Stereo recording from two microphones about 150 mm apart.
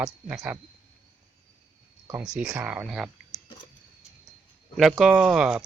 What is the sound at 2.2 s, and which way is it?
Speech, 5° right (ahead or behind).